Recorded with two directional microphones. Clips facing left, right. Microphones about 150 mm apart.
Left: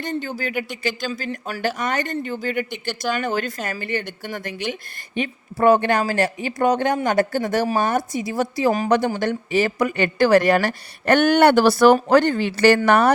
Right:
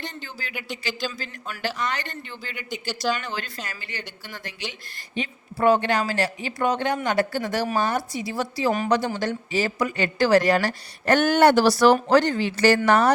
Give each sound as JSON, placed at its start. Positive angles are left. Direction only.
{"t": 0.0, "sound": "speech", "side_deg": 50}